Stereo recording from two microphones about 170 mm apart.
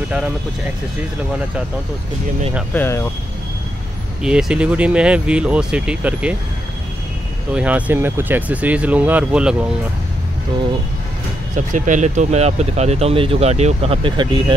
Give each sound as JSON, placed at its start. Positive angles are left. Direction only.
{"t": 2.7, "sound": "speech", "side_deg": 15}
{"t": 4.2, "sound": "speech", "side_deg": -5}
{"t": 7.5, "sound": "speech", "side_deg": -10}
{"t": 11.5, "sound": "speech", "side_deg": -50}